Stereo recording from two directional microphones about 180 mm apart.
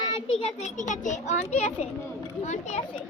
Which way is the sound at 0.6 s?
40° left (ahead or behind).